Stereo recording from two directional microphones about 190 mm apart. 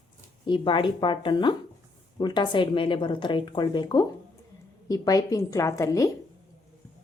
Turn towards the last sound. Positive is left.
turn(degrees=15)  # may be behind; listen again after turning